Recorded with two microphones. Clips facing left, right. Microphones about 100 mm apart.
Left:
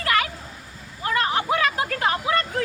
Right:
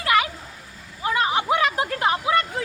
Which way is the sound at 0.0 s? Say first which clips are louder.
Right 2 dB; 15° right (ahead or behind).